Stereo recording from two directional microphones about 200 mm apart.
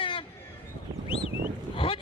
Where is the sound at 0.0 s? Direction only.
25° left (ahead or behind).